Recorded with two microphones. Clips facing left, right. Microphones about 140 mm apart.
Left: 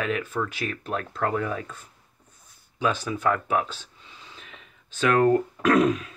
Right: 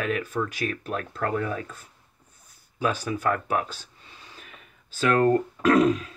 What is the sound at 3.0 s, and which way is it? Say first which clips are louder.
Speech: left 1 dB; 50° right (ahead or behind).